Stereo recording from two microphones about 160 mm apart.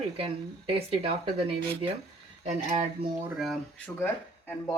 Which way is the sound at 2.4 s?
50° right (ahead or behind).